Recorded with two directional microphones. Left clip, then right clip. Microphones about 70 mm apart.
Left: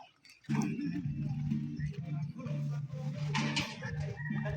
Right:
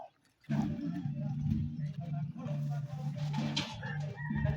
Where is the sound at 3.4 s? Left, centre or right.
Centre.